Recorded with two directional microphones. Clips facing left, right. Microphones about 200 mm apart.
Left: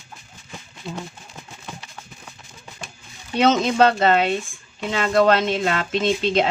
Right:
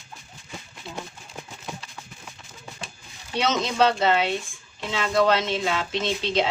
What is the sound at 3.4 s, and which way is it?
Speech, 50° left (ahead or behind).